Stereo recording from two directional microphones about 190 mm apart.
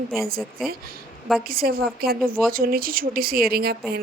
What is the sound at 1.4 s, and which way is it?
Speech, 50° right (ahead or behind).